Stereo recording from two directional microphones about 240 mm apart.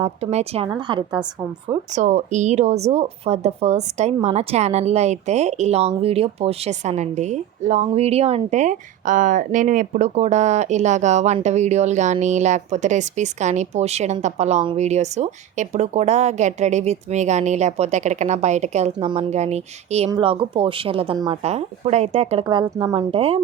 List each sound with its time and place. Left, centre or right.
0.0 s a woman's voice: right